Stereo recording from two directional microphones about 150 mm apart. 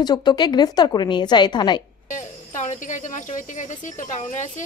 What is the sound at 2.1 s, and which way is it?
Speech, 55° left (ahead or behind).